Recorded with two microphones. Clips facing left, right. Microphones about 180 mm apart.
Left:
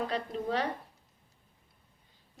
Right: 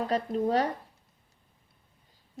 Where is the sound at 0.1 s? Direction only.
40° right (ahead or behind).